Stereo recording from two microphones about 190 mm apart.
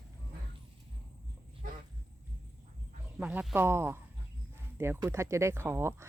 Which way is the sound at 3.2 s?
10° right (ahead or behind).